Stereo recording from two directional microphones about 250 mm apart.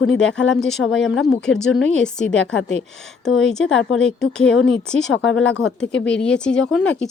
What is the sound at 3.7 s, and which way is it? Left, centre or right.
Speech, left.